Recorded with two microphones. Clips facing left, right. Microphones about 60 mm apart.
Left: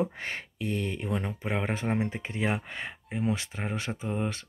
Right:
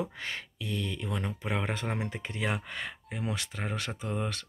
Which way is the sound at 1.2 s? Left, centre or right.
Centre.